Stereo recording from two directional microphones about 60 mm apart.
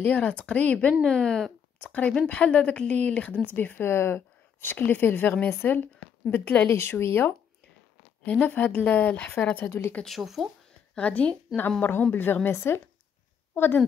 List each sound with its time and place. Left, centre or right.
0.0 s a woman's voice: left
1.9 s a woman's voice: left
3.8 s a woman's voice: left
6.7 s speech: left
8.3 s a woman's voice: left
9.7 s speech: left
10.0 s speech: centre
11.0 s a woman's voice: left